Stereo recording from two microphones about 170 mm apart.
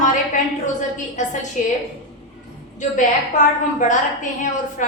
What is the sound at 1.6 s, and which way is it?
Speech, 45° left (ahead or behind).